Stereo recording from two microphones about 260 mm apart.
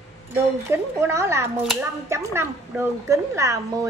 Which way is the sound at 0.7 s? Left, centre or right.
Centre.